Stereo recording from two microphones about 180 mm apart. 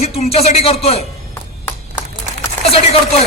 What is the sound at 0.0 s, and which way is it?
Speech, 35° left (ahead or behind).